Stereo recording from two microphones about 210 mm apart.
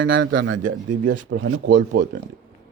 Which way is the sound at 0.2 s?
70° right (ahead or behind).